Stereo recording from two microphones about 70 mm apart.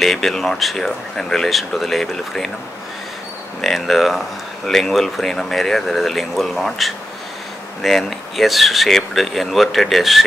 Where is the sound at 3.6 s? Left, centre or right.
Centre.